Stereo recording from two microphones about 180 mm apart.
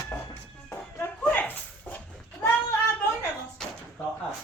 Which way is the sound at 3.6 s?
5° left (ahead or behind).